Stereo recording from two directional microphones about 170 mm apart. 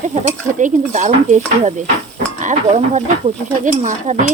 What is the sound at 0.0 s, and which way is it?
Speech, 45° right (ahead or behind).